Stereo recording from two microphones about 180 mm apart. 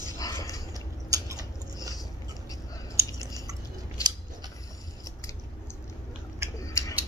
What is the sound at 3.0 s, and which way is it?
Chewing, 15° right (ahead or behind).